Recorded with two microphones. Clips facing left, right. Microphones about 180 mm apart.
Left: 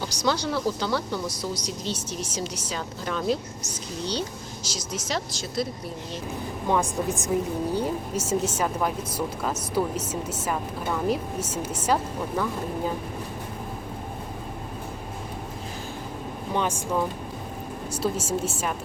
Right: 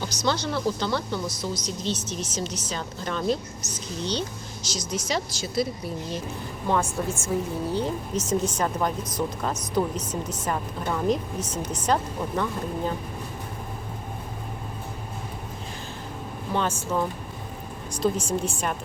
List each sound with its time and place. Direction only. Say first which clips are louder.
0.0 s a woman's voice: left 1 dB; 10° left (ahead or behind)
6.7 s a woman's voice: left 1 dB; 15° left (ahead or behind)
16.6 s a woman's voice: even; 10° left (ahead or behind)